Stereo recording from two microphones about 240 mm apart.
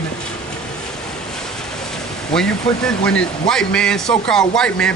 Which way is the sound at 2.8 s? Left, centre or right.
Centre.